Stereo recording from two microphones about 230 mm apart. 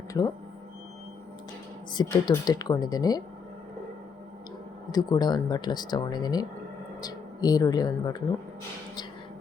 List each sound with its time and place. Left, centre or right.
1.9 s speech: centre
4.9 s speech: centre